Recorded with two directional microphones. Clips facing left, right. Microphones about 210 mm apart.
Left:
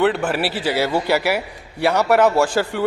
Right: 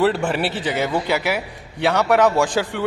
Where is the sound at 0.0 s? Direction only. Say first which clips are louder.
Even; 5° left (ahead or behind).